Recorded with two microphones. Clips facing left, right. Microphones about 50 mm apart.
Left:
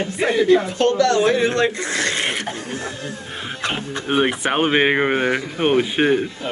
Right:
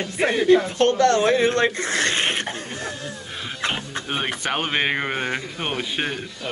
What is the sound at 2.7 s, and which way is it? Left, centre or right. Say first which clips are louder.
Speech: left 3 dB; left.